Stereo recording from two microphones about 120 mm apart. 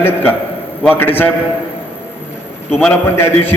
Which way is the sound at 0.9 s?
15° left (ahead or behind).